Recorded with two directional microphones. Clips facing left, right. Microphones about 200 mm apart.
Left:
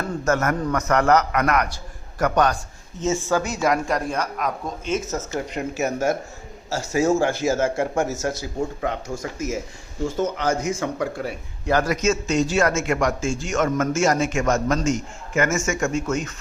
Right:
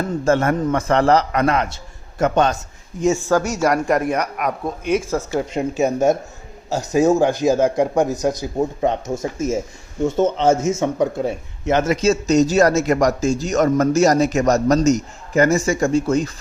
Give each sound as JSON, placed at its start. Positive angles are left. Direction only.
{"t": 0.0, "sound": "a man's voice", "side_deg": -25}
{"t": 5.5, "sound": "a man's voice", "side_deg": -20}